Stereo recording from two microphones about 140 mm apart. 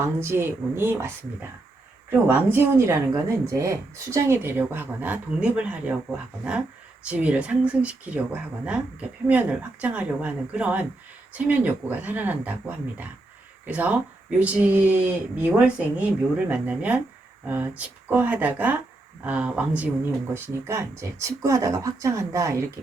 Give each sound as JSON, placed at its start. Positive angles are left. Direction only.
{"t": 0.0, "sound": "speech", "side_deg": -15}
{"t": 20.3, "sound": "speech", "side_deg": -20}